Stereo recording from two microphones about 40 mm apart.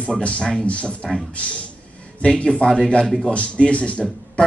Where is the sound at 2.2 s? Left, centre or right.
Left.